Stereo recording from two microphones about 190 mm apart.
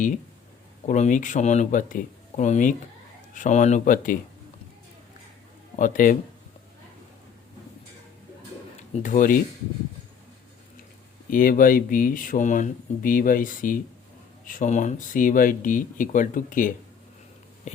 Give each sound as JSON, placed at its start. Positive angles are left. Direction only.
{"t": 0.9, "sound": "speech", "side_deg": 40}
{"t": 5.7, "sound": "speech", "side_deg": 45}
{"t": 9.0, "sound": "speech", "side_deg": 45}
{"t": 11.3, "sound": "speech", "side_deg": 45}